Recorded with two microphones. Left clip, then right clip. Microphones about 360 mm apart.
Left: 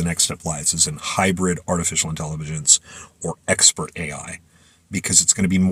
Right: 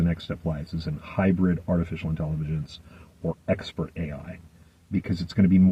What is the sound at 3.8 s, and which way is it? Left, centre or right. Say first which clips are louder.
Speech: left 6 dB; left.